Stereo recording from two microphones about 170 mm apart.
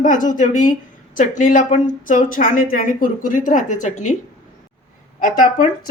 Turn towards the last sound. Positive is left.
turn(degrees=55)  # may be behind; listen again after turning